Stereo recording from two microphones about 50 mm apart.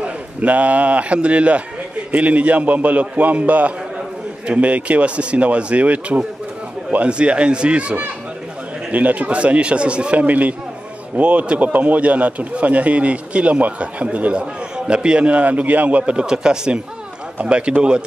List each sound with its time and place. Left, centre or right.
0.0 s a man's voice: right
16.0 s a man's voice: centre